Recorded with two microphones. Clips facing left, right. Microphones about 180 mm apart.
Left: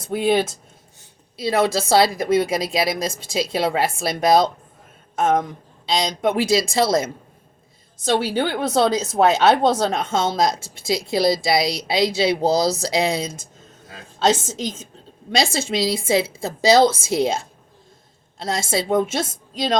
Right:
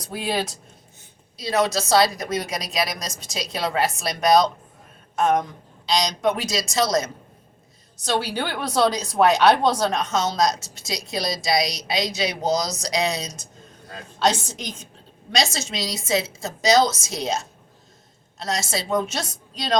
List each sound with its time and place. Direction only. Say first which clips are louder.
0.0 s a woman's voice: left 7 dB; 25° left (ahead or behind)
15.5 s a woman's voice: left 8 dB; 25° left (ahead or behind)
18.9 s a woman's voice: left 4 dB; 50° left (ahead or behind)